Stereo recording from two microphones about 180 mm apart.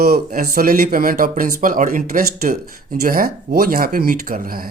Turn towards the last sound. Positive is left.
turn(degrees=-55)  # may be behind; listen again after turning